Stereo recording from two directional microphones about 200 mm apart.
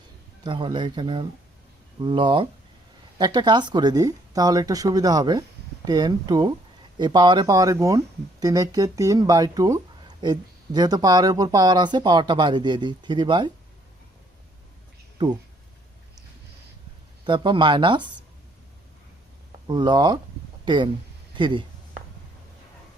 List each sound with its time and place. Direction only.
0.4 s speech: 25° right (ahead or behind)
17.2 s speech: 25° right (ahead or behind)
19.6 s speech: 20° right (ahead or behind)